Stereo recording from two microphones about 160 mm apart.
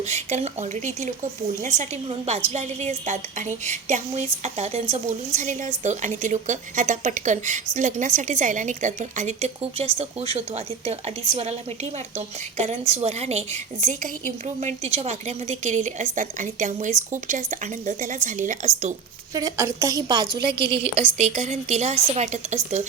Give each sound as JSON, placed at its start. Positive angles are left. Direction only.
{"t": 0.0, "sound": "a woman's voice", "side_deg": -45}
{"t": 19.3, "sound": "a woman's voice", "side_deg": -20}
{"t": 20.5, "sound": "a woman's voice", "side_deg": -90}
{"t": 21.2, "sound": "a woman's voice", "side_deg": -45}